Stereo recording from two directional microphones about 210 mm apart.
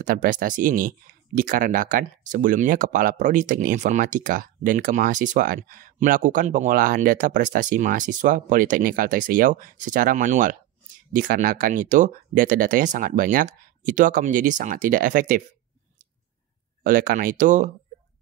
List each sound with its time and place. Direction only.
0.0 s speech: 40° right (ahead or behind)
16.8 s speech: 40° right (ahead or behind)